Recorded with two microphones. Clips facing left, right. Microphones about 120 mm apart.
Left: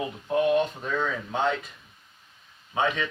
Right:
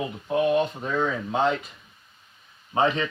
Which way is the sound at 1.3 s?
30° right (ahead or behind).